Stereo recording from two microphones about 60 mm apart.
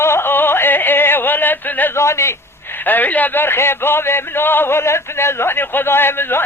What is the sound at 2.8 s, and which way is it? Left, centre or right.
A man's voice, left.